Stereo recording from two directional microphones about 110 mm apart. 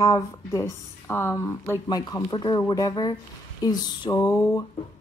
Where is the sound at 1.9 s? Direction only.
40° left (ahead or behind).